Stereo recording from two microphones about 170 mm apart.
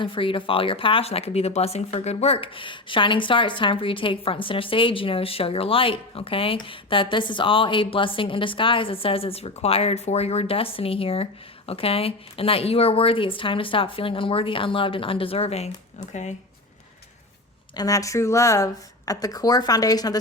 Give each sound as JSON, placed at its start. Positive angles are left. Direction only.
{"t": 0.0, "sound": "speech", "side_deg": 30}
{"t": 17.7, "sound": "speech", "side_deg": 20}